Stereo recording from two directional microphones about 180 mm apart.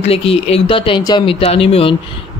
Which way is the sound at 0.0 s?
30° left (ahead or behind).